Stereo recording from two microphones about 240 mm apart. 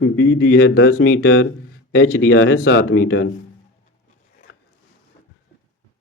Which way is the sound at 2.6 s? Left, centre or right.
Left.